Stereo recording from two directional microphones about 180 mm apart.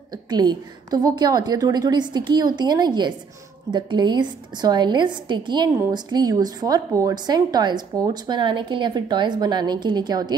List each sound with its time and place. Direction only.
0.1 s a woman's voice: 25° right (ahead or behind)